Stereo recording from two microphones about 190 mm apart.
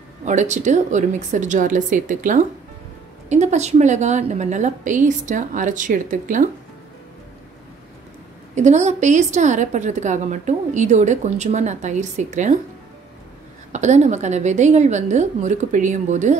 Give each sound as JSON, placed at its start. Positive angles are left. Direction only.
{"t": 0.2, "sound": "a woman's voice", "side_deg": -40}
{"t": 8.5, "sound": "a woman's voice", "side_deg": -40}
{"t": 13.7, "sound": "a woman's voice", "side_deg": -40}